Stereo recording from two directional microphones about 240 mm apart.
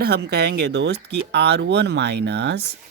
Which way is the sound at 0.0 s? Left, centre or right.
Right.